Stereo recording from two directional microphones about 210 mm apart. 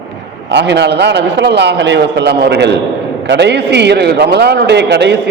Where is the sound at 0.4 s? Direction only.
55° right (ahead or behind).